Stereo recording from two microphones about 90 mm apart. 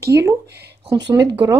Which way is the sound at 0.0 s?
35° right (ahead or behind).